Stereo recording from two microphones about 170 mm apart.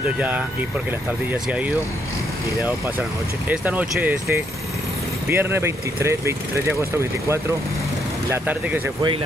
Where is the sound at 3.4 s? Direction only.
10° right (ahead or behind).